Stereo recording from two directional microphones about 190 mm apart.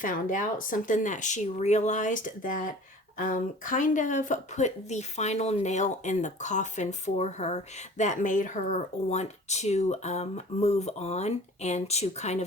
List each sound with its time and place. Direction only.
0.0 s speech: 45° left (ahead or behind)